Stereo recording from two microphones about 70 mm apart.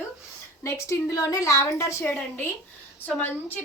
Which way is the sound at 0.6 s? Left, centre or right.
Left.